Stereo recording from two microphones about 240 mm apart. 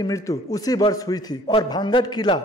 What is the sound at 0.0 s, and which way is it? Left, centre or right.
A man's voice, centre.